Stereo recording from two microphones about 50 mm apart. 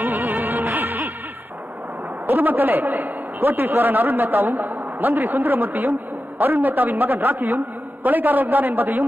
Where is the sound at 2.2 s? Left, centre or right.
Right.